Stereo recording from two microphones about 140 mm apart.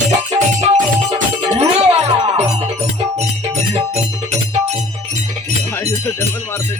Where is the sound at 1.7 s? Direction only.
45° right (ahead or behind).